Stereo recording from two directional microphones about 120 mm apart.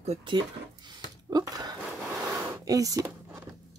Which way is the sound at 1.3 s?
30° right (ahead or behind).